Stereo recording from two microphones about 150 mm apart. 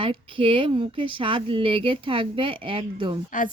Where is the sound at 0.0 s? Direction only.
35° right (ahead or behind).